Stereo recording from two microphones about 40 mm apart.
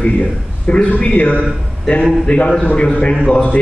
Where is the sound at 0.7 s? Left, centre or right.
Left.